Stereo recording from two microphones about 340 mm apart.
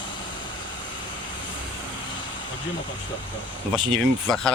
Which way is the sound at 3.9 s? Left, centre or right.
Centre.